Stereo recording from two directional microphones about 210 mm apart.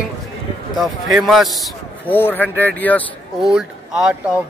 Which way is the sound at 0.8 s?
Centre (ahead or behind).